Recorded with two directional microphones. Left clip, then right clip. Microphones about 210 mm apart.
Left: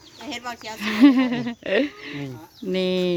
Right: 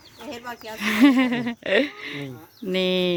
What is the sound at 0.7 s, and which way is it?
Speech, centre (ahead or behind).